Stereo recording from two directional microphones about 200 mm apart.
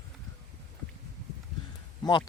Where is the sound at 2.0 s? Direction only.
20° left (ahead or behind).